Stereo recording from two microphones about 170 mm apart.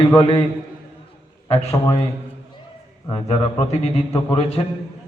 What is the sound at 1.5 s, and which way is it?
Speech, 40° left (ahead or behind).